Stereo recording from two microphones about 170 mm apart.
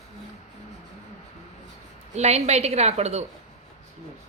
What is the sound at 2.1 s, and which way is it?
A woman's voice, 40° right (ahead or behind).